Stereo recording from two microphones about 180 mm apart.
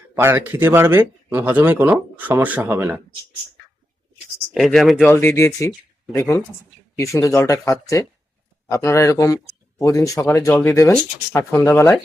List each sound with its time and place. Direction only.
0.1 s speech: 15° right (ahead or behind)
4.5 s speech: centre (ahead or behind)
5.1 s speech: 15° left (ahead or behind)